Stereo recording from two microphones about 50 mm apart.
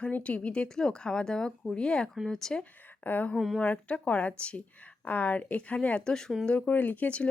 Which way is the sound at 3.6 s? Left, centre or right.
Left.